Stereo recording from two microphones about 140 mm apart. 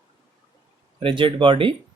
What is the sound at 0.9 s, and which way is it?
Speech, 35° right (ahead or behind).